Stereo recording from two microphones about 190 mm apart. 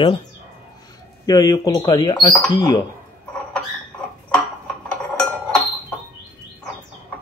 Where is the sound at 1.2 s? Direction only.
20° left (ahead or behind).